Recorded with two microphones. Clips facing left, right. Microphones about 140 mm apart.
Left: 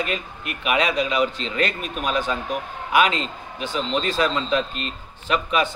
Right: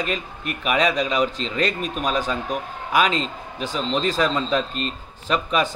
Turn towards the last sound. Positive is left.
turn(degrees=-40)  # may be behind; listen again after turning